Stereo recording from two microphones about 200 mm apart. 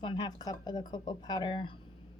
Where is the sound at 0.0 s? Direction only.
25° left (ahead or behind).